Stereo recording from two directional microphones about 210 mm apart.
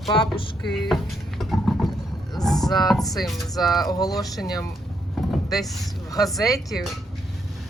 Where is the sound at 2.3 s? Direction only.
Centre (ahead or behind).